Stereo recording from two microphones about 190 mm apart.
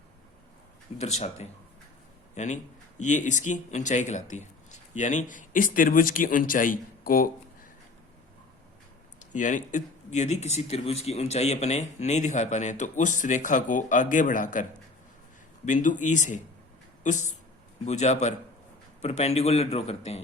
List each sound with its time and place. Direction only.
0.9 s a man's voice: 35° left (ahead or behind)
9.1 s speech: 40° left (ahead or behind)